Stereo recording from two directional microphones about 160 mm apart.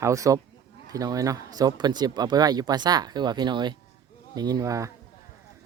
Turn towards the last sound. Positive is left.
turn(degrees=-20)  # may be behind; listen again after turning